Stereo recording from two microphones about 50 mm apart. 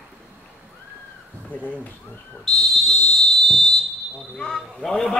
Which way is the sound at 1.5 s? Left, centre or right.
Left.